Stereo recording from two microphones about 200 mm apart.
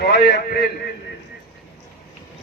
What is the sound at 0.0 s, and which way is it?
Speech, 55° left (ahead or behind).